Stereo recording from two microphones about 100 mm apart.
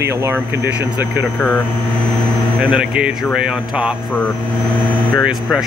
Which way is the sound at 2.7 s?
10° right (ahead or behind).